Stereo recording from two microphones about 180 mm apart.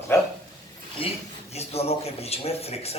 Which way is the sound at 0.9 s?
35° left (ahead or behind).